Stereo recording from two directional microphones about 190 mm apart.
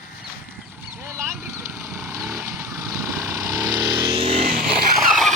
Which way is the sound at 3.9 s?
30° right (ahead or behind).